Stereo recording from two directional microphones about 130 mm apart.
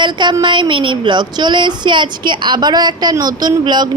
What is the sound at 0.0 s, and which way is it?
A woman's voice, 35° right (ahead or behind).